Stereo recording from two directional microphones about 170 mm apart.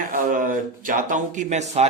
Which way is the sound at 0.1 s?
55° right (ahead or behind).